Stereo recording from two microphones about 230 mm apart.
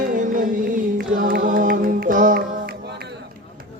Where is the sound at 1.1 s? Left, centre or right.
Right.